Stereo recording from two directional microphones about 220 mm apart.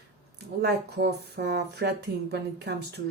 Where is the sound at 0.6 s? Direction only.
50° right (ahead or behind).